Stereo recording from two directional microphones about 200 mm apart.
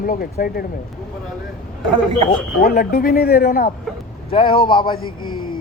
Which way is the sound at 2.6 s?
50° left (ahead or behind).